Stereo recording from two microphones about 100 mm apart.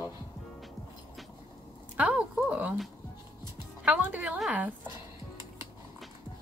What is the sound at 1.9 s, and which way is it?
Speech, 15° right (ahead or behind).